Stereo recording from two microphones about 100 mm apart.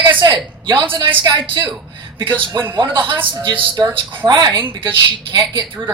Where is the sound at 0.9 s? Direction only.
50° right (ahead or behind).